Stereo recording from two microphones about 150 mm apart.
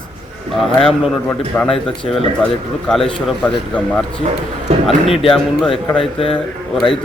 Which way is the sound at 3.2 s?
5° left (ahead or behind).